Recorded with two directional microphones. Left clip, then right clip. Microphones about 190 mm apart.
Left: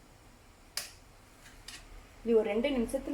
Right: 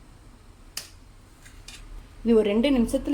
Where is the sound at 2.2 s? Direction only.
50° right (ahead or behind).